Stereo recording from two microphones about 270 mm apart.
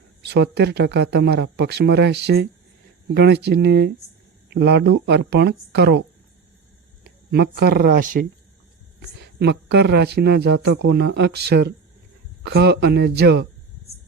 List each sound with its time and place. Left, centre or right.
0.2 s speech: right
7.0 s speech: right